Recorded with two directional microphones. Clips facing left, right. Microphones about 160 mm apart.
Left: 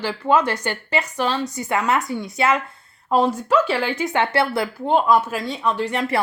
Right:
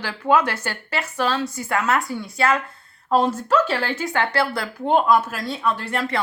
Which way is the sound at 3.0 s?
10° left (ahead or behind).